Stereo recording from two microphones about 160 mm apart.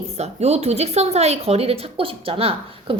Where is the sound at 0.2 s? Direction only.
40° right (ahead or behind).